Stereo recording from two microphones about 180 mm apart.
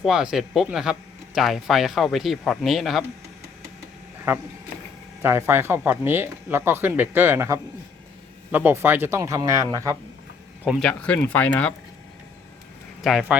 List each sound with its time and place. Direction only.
0.0 s speech: 5° right (ahead or behind)
5.2 s speech: 15° right (ahead or behind)
10.6 s speech: 5° right (ahead or behind)
10.8 s speech: 5° left (ahead or behind)
13.0 s speech: centre (ahead or behind)